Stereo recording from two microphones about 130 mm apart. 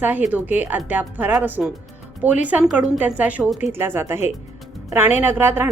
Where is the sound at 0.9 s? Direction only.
15° right (ahead or behind).